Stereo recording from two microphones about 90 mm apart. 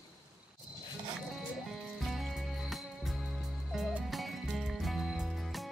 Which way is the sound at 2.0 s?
Centre (ahead or behind).